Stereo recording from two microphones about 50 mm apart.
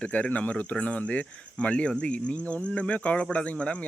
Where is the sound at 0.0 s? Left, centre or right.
Left.